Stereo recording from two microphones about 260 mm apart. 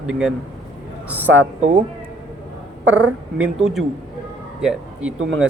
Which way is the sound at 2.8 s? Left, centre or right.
Centre.